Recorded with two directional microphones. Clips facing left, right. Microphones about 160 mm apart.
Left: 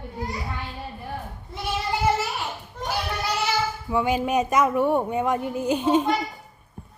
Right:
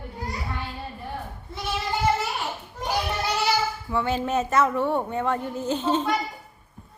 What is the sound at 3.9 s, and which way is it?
Speech, 15° left (ahead or behind).